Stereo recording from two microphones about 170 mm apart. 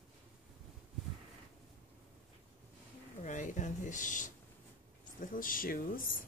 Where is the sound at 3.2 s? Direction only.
45° left (ahead or behind).